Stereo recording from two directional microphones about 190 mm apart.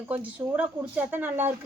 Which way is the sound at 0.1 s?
10° right (ahead or behind).